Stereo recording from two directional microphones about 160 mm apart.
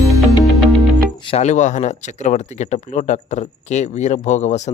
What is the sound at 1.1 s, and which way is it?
Music, 30° left (ahead or behind).